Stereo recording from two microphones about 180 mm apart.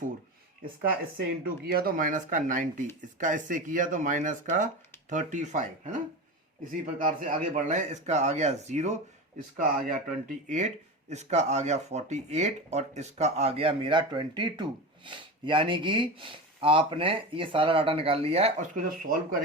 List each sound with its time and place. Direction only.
1.5 s speech: 60° right (ahead or behind); by 9.0 s 40° right (ahead or behind)
9.6 s speech: 50° right (ahead or behind)